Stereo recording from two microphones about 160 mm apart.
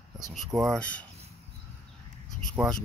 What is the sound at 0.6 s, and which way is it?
Speech, 5° left (ahead or behind).